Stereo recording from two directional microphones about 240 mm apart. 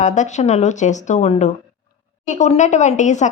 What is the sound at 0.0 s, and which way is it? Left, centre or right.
Speech, left.